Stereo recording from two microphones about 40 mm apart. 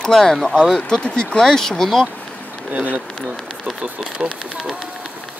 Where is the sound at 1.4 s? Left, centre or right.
Centre.